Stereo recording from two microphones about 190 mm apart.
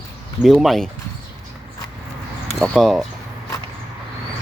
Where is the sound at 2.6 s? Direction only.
Centre (ahead or behind).